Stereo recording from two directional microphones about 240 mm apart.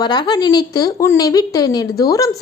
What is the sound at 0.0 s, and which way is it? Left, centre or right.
A woman's voice, centre.